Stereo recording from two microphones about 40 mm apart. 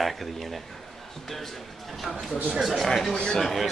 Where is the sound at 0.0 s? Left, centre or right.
Centre.